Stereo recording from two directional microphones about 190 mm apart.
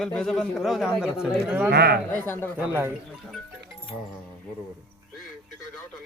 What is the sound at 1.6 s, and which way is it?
Speech, 55° right (ahead or behind).